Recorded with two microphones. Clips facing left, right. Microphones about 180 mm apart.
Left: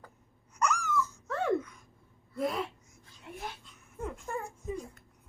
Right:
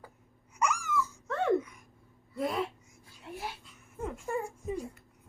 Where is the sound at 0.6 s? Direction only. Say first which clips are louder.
Left 1 dB; 10° right (ahead or behind).